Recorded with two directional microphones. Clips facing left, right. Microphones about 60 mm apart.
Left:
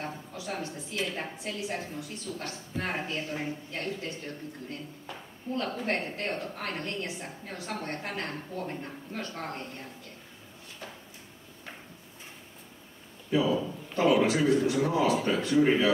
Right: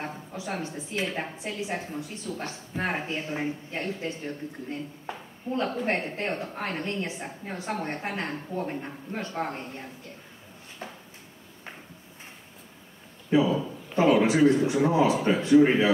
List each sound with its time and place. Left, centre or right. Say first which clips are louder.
0.0 s speech: right 2 dB; right
10.8 s drawer open or close: right 4 dB; right
13.3 s speech: right 3 dB; right